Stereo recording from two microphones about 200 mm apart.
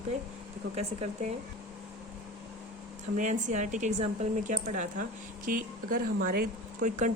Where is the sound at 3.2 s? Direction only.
40° right (ahead or behind).